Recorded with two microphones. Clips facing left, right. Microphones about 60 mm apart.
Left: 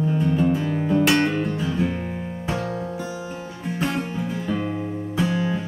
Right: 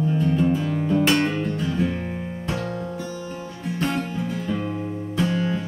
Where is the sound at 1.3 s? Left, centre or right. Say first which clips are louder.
Left 1 dB; left.